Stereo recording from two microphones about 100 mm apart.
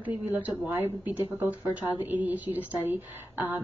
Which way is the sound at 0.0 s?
15° right (ahead or behind).